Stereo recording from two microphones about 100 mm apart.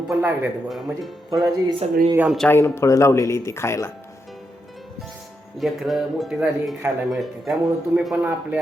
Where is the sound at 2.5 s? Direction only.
25° left (ahead or behind).